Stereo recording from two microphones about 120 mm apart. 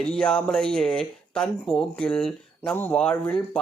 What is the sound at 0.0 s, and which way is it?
Speech, 5° left (ahead or behind).